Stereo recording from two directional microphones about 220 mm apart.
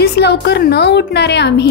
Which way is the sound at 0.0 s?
50° left (ahead or behind).